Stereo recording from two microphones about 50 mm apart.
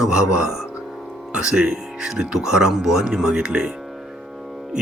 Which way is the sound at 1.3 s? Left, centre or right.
Centre.